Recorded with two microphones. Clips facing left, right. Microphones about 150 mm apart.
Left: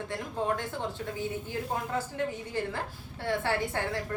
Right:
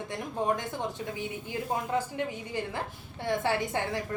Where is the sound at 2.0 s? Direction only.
15° right (ahead or behind).